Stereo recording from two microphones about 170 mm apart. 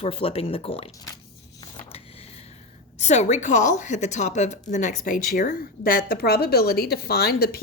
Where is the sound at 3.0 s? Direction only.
40° left (ahead or behind).